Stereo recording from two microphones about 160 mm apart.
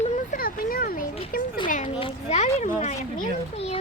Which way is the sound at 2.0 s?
45° left (ahead or behind).